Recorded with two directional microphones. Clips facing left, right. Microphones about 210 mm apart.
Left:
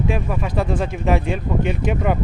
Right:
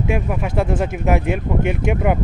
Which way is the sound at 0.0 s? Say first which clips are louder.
Right 1 dB; 10° right (ahead or behind).